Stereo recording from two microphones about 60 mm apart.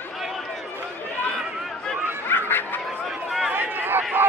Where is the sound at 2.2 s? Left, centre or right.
Left.